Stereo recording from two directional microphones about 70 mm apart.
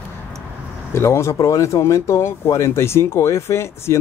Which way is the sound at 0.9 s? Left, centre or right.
Left.